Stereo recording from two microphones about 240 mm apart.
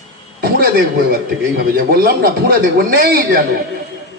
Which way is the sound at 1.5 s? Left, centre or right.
Right.